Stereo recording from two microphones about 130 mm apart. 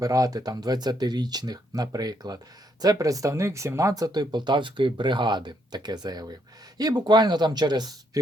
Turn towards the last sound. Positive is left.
turn(degrees=-35)  # may be behind; listen again after turning